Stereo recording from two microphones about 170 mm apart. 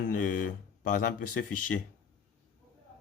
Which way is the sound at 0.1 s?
50° left (ahead or behind).